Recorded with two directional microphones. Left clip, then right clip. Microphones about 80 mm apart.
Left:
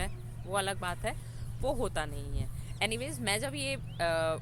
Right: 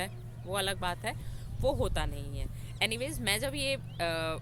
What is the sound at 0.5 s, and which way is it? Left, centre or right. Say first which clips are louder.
A woman's voice: even; right.